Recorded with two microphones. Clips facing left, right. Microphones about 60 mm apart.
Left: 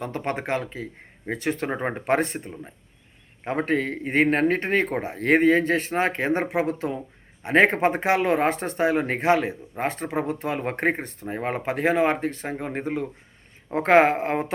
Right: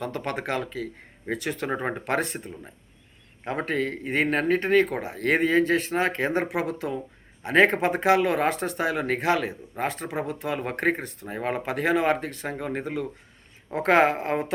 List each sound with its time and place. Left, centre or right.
0.0 s speech: left